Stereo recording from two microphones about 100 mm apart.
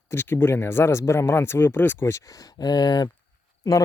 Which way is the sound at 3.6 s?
40° left (ahead or behind).